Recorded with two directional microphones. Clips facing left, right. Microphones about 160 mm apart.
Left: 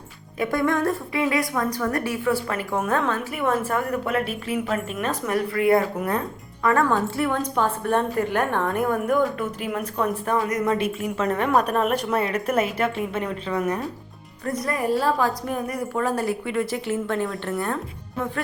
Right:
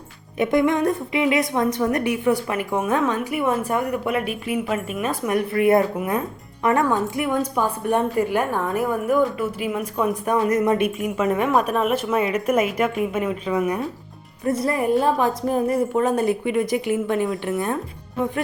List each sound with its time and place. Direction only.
0.3 s speech: 20° right (ahead or behind)
5.3 s a woman's voice: 20° right (ahead or behind)
14.4 s a woman's voice: 30° right (ahead or behind)